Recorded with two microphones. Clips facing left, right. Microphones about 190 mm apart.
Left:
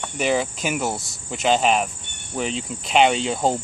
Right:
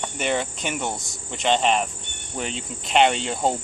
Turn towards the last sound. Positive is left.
turn(degrees=0)  # may be behind; listen again after turning